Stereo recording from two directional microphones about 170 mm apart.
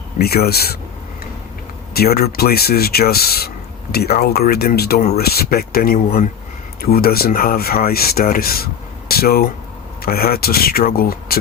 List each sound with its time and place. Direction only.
0.2 s speech: 65° left (ahead or behind)
1.9 s speech: 65° left (ahead or behind)